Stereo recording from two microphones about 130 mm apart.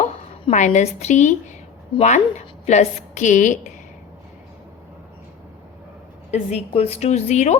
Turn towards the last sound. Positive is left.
turn(degrees=60)  # may be behind; listen again after turning